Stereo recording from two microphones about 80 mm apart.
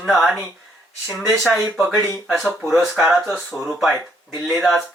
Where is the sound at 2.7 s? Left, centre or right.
Centre.